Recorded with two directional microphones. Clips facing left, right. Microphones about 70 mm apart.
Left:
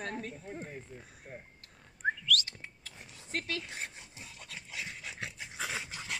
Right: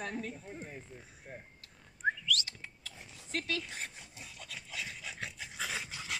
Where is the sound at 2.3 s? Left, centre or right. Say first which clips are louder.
Left 5 dB; left.